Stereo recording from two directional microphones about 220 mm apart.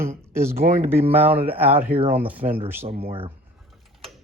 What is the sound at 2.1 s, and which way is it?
Speech, 5° right (ahead or behind).